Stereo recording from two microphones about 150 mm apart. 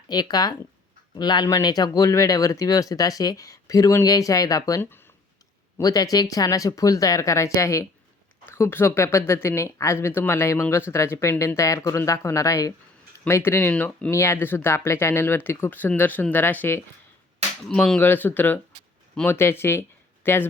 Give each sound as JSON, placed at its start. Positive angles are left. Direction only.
{"t": 0.1, "sound": "speech", "side_deg": 25}